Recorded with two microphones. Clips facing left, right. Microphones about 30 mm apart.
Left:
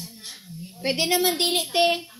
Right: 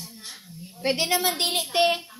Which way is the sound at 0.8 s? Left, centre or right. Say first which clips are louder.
Left 1 dB; left.